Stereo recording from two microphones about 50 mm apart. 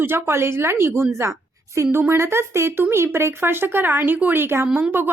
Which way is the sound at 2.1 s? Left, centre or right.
Right.